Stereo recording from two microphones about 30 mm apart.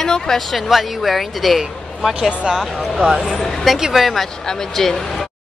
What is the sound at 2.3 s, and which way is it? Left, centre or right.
Speech, right.